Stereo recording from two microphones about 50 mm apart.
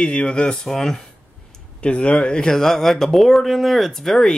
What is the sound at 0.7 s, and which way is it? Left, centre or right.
Speech, centre.